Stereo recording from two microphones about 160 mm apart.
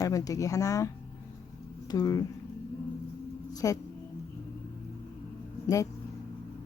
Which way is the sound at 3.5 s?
20° left (ahead or behind).